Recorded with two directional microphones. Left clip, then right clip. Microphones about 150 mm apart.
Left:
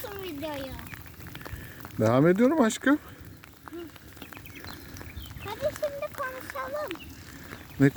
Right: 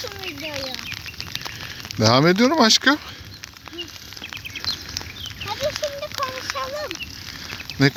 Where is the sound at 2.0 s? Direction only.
5° right (ahead or behind).